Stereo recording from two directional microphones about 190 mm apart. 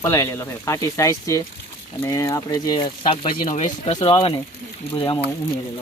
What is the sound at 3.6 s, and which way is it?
Speech, 40° left (ahead or behind).